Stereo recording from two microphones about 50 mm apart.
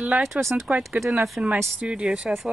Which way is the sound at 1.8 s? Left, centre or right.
Right.